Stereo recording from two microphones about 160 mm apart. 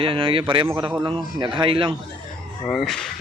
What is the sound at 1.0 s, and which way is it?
Speech, 30° right (ahead or behind).